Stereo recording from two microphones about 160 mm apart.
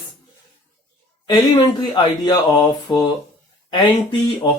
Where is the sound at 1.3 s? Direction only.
25° left (ahead or behind).